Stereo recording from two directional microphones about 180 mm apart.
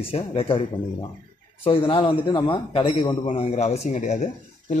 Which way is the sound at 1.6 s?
30° left (ahead or behind).